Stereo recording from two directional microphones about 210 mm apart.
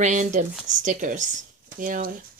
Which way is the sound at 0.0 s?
35° right (ahead or behind).